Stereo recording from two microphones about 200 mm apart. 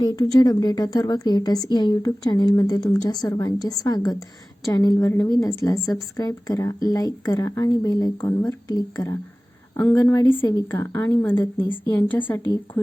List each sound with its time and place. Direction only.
0.0 s a woman's voice: 20° left (ahead or behind)